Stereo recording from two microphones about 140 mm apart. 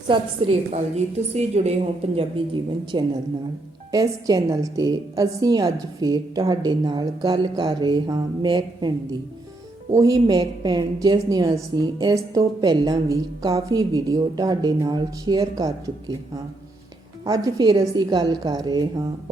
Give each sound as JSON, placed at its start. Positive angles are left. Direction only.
{"t": 0.1, "sound": "a woman's voice", "side_deg": -45}
{"t": 2.9, "sound": "a woman's voice", "side_deg": -35}
{"t": 10.0, "sound": "a woman's voice", "side_deg": -25}
{"t": 10.3, "sound": "a woman's voice", "side_deg": -35}
{"t": 17.2, "sound": "a woman's voice", "side_deg": -25}